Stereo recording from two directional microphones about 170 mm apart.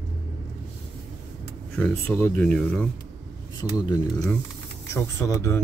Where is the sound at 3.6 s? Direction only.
20° left (ahead or behind).